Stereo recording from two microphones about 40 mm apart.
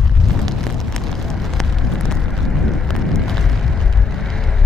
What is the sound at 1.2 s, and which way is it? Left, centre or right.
Vehicle, centre.